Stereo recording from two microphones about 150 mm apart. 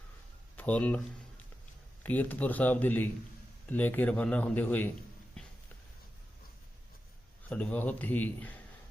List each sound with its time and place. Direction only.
0.5 s speech: 10° left (ahead or behind)
2.0 s speech: 10° left (ahead or behind)
7.5 s speech: 10° left (ahead or behind)